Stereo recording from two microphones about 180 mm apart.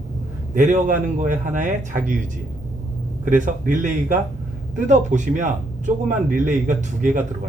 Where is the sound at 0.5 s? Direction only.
45° right (ahead or behind).